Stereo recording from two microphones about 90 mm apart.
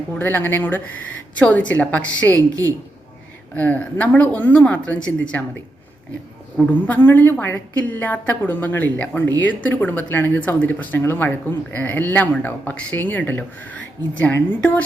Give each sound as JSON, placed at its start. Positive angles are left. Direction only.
{"t": 0.2, "sound": "speech", "side_deg": 20}
{"t": 2.3, "sound": "a woman's voice", "side_deg": -40}
{"t": 3.5, "sound": "speech", "side_deg": 15}
{"t": 6.7, "sound": "speech", "side_deg": 20}